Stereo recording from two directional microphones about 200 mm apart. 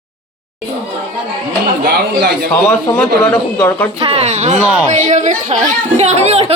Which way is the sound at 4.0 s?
30° right (ahead or behind).